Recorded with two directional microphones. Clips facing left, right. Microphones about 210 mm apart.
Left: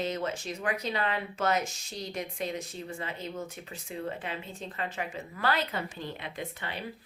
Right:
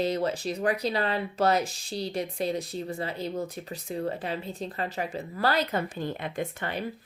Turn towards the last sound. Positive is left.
turn(degrees=-50)  # may be behind; listen again after turning